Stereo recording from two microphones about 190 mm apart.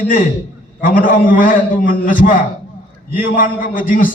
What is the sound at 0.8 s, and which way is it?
A man's voice, 45° left (ahead or behind).